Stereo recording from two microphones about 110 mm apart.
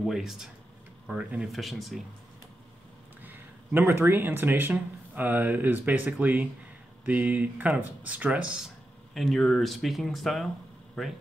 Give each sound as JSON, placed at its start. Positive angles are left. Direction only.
{"t": 0.0, "sound": "speech", "side_deg": 0}
{"t": 3.2, "sound": "speech", "side_deg": -20}